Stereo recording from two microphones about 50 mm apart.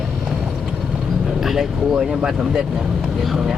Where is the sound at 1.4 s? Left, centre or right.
Centre.